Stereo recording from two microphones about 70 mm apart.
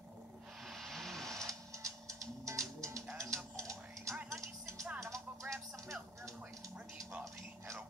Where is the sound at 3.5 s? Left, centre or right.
Right.